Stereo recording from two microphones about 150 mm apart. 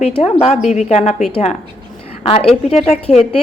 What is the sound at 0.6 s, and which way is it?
A woman's voice, 50° left (ahead or behind).